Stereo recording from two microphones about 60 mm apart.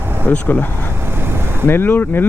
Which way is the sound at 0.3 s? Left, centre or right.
Left.